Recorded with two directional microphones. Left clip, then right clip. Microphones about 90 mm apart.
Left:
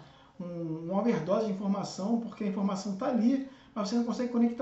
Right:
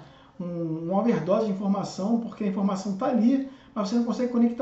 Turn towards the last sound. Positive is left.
turn(degrees=0)  # may be behind; listen again after turning